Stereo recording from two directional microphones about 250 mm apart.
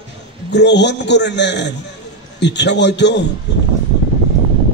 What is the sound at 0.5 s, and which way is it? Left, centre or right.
A man's voice, left.